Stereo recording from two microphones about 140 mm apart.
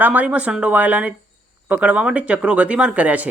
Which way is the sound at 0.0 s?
10° right (ahead or behind).